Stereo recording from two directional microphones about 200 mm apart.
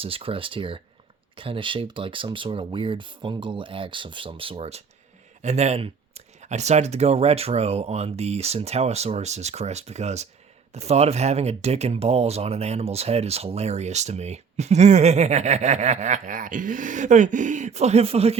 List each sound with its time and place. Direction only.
0.0 s speech: 30° right (ahead or behind)